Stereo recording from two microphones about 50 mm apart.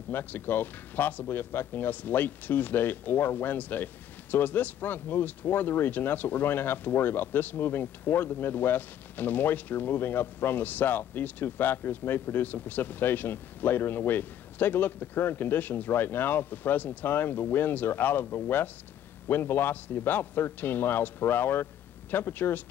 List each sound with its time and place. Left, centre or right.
0.1 s a man's voice: left